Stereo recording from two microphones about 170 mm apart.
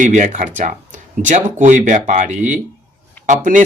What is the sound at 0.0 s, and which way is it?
Speech, 45° right (ahead or behind).